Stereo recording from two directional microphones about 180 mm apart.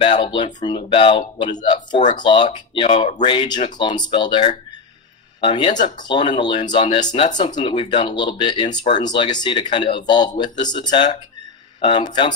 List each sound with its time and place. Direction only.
0.0 s speech: 30° left (ahead or behind)